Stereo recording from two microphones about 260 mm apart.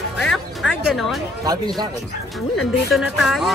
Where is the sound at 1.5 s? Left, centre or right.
Centre.